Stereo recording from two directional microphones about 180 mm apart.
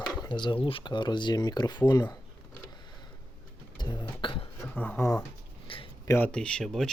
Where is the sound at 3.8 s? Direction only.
25° left (ahead or behind).